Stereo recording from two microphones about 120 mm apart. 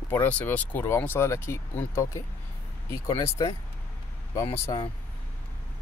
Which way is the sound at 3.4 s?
35° left (ahead or behind).